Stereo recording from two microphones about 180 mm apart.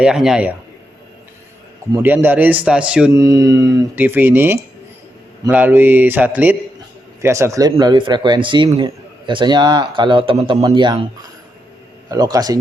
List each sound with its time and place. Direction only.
0.0 s a man's voice: 5° right (ahead or behind)
2.0 s speech: 10° right (ahead or behind)
3.2 s speech: 20° right (ahead or behind)